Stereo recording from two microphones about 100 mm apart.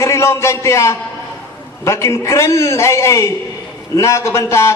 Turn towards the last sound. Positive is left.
turn(degrees=30)  # may be behind; listen again after turning